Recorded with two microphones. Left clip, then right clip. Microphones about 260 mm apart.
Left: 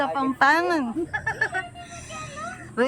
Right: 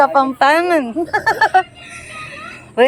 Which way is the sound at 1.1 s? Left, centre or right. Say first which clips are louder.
Right 14 dB; right.